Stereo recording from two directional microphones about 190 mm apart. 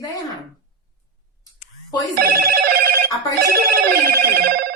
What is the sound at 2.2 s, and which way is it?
Telephone bell ringing, 55° right (ahead or behind).